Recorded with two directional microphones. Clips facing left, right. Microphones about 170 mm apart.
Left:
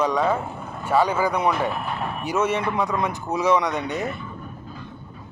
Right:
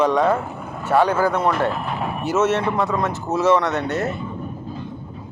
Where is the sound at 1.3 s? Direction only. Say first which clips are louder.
Right 2 dB; centre (ahead or behind).